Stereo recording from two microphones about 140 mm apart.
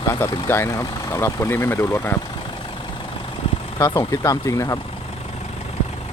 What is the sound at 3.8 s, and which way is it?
Speech, 25° left (ahead or behind).